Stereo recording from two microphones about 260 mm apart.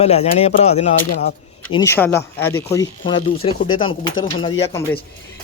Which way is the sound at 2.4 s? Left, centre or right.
Left.